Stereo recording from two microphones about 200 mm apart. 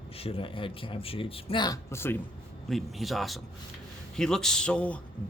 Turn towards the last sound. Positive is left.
turn(degrees=5)  # may be behind; listen again after turning